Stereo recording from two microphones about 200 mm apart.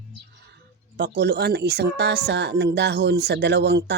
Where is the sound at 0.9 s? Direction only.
55° right (ahead or behind).